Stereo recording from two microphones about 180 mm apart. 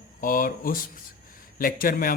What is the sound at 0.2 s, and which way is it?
Speech, 50° left (ahead or behind).